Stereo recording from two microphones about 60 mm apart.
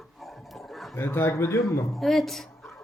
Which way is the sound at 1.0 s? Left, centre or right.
Left.